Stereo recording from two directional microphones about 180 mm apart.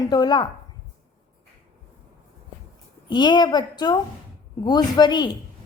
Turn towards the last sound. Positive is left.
turn(degrees=25)  # may be behind; listen again after turning